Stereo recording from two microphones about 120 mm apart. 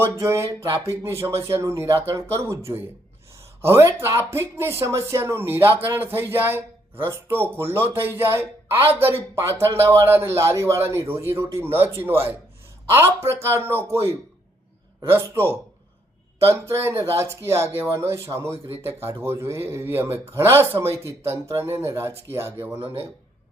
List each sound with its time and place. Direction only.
0.0 s speech: 20° right (ahead or behind)
3.6 s speech: 20° right (ahead or behind)
15.1 s speech: 20° right (ahead or behind)
16.8 s speech: 20° right (ahead or behind)